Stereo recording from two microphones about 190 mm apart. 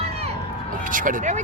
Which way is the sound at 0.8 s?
45° right (ahead or behind).